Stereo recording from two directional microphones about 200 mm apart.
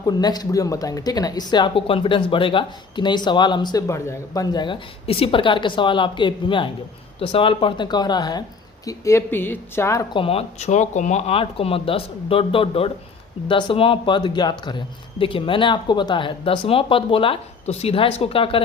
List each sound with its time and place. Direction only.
0.0 s speech: 20° left (ahead or behind)